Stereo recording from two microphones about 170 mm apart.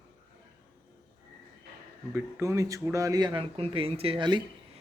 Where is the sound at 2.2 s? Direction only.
15° right (ahead or behind).